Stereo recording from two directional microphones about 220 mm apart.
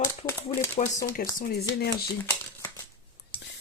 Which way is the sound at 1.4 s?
45° left (ahead or behind).